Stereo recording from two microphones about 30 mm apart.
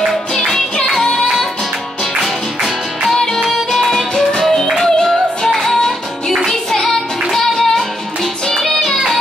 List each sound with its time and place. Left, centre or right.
3.4 s music: centre